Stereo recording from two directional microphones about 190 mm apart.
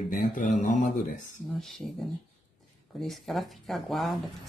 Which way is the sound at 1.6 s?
Centre (ahead or behind).